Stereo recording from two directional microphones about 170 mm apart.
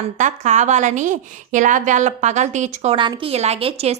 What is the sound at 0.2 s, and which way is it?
A woman's voice, 45° right (ahead or behind).